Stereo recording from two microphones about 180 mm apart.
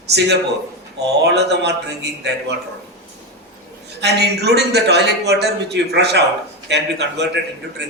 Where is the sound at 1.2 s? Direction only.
70° right (ahead or behind).